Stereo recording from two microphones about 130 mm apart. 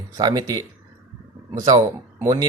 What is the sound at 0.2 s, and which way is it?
Speech, 30° right (ahead or behind).